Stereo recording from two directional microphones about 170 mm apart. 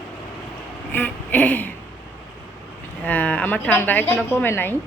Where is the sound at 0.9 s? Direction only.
10° left (ahead or behind).